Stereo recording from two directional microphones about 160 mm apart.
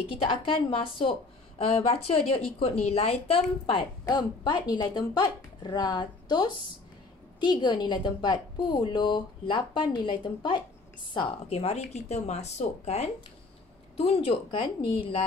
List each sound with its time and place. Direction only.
0.3 s a woman's voice: 35° left (ahead or behind)